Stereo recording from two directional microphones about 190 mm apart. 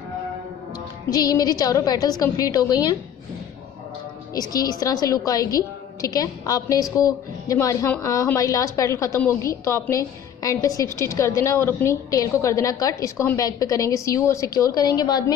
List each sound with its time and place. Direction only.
1.1 s a woman's voice: 20° left (ahead or behind)
4.3 s a woman's voice: 20° left (ahead or behind)